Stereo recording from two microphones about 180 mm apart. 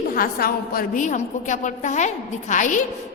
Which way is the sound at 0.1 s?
55° left (ahead or behind).